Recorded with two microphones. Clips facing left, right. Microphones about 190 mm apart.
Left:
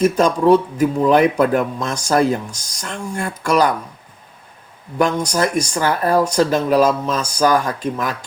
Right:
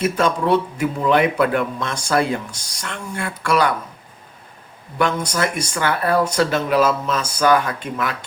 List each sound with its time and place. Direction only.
0.0 s speech: 40° left (ahead or behind)
3.2 s speech: 45° left (ahead or behind)
4.9 s speech: 35° left (ahead or behind)